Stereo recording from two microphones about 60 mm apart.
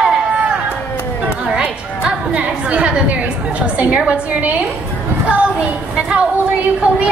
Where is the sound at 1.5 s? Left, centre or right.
Centre.